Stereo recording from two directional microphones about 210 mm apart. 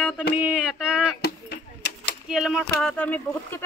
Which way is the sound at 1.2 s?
50° left (ahead or behind).